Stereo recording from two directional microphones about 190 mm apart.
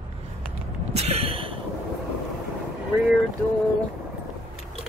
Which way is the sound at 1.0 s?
35° right (ahead or behind).